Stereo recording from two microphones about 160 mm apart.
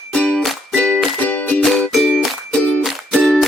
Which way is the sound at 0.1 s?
5° left (ahead or behind).